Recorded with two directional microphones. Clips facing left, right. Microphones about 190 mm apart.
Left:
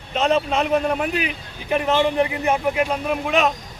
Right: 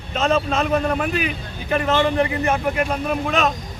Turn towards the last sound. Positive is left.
turn(degrees=15)  # may be behind; listen again after turning